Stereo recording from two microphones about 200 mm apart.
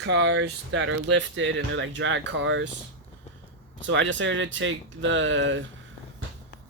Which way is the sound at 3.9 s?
65° right (ahead or behind).